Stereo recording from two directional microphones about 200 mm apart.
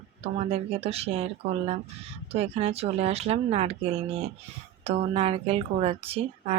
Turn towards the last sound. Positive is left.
turn(degrees=-30)  # may be behind; listen again after turning